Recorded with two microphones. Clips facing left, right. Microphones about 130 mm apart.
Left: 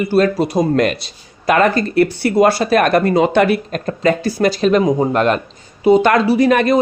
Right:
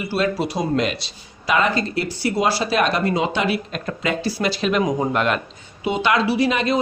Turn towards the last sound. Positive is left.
turn(degrees=50)  # may be behind; listen again after turning